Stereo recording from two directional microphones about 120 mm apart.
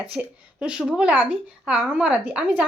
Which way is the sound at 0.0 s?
10° right (ahead or behind).